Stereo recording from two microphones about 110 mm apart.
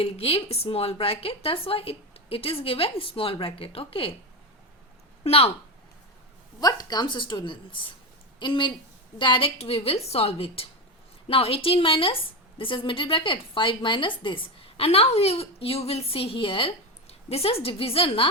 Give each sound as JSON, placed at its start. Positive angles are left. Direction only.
{"t": 0.0, "sound": "a woman's voice", "side_deg": 60}
{"t": 5.2, "sound": "speech", "side_deg": 65}
{"t": 6.6, "sound": "a woman's voice", "side_deg": 35}